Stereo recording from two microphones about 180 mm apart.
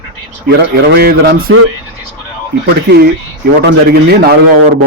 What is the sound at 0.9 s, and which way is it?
Speech, 60° right (ahead or behind).